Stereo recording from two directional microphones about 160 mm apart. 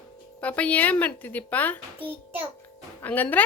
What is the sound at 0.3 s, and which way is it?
A woman's voice, 10° left (ahead or behind).